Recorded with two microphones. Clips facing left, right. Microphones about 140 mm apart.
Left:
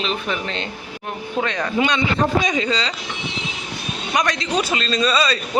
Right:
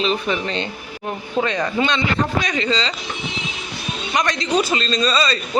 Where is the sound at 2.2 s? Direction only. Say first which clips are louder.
Left 3 dB; 50° left (ahead or behind).